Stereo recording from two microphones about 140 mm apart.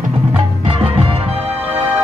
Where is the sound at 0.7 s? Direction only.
40° right (ahead or behind).